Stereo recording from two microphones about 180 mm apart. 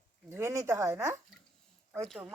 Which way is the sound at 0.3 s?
15° right (ahead or behind).